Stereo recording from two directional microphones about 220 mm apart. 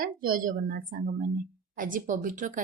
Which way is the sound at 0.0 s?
40° right (ahead or behind).